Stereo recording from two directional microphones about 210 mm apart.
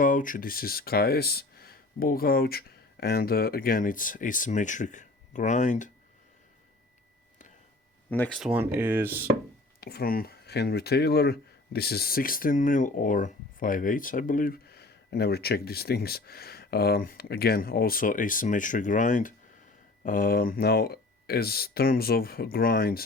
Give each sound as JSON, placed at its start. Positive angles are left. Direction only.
{"t": 0.0, "sound": "speech", "side_deg": 40}
{"t": 8.1, "sound": "speech", "side_deg": 5}
{"t": 9.8, "sound": "speech", "side_deg": 45}